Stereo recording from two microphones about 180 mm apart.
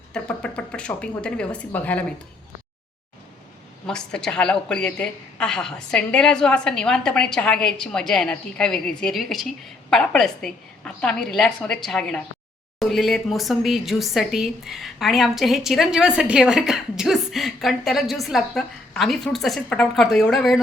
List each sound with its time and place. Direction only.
0.1 s a woman's voice: 5° left (ahead or behind)
3.8 s a woman's voice: 5° left (ahead or behind)